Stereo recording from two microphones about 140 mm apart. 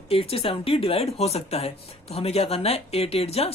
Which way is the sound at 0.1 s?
45° left (ahead or behind).